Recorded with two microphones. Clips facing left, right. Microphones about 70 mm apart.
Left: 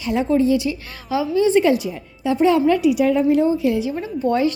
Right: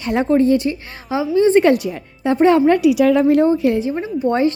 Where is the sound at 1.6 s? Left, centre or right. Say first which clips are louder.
Right 3 dB; right.